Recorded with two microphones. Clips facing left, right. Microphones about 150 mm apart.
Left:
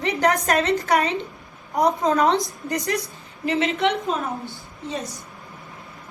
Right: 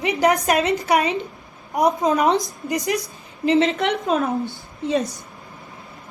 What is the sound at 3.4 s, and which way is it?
Speech, 30° right (ahead or behind).